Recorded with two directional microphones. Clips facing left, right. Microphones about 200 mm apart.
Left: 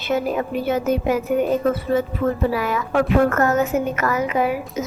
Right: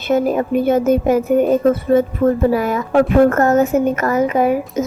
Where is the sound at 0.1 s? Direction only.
45° right (ahead or behind).